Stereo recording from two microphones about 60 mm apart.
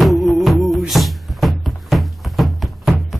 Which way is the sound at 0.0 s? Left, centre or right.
Centre.